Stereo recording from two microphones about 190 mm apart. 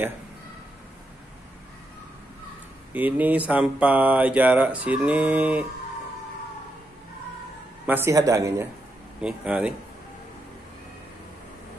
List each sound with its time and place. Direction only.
2.9 s speech: 10° right (ahead or behind)
7.8 s speech: 10° right (ahead or behind)
9.2 s speech: 5° right (ahead or behind)